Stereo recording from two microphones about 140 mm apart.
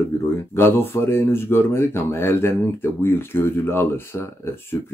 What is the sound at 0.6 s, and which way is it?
Speech, 15° left (ahead or behind).